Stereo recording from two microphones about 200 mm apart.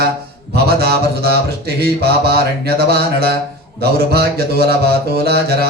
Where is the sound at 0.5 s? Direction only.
55° right (ahead or behind).